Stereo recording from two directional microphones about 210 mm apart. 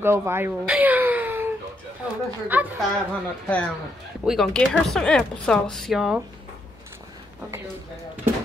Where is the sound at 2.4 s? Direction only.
10° right (ahead or behind).